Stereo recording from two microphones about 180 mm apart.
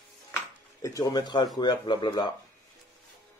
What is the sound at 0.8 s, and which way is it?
Speech, 20° left (ahead or behind).